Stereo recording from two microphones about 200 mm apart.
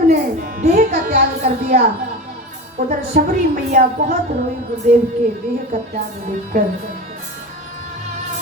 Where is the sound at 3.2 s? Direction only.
45° right (ahead or behind).